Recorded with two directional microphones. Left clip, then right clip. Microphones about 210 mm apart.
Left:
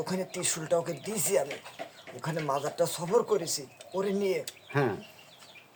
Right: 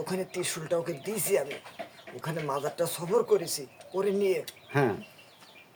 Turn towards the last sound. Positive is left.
turn(degrees=-20)  # may be behind; listen again after turning